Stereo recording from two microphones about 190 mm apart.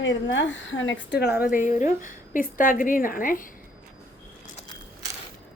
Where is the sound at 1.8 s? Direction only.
45° left (ahead or behind).